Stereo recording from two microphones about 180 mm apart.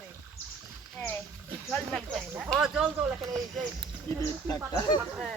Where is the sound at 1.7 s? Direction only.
5° left (ahead or behind).